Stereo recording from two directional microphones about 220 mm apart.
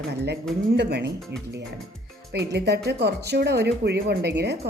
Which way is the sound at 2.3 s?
50° right (ahead or behind).